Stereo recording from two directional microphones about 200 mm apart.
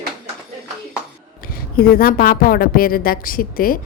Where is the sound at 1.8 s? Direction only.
45° left (ahead or behind).